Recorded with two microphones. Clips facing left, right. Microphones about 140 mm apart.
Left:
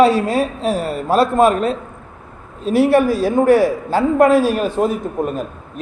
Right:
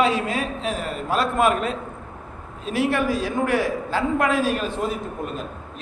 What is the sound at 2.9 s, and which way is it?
A man's voice, 35° left (ahead or behind).